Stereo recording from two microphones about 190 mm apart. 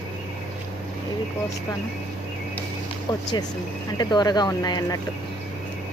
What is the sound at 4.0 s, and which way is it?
Speech, 20° left (ahead or behind).